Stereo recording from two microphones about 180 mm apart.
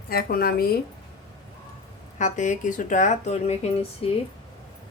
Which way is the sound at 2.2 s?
45° left (ahead or behind).